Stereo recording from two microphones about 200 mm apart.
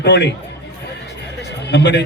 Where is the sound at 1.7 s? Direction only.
60° left (ahead or behind).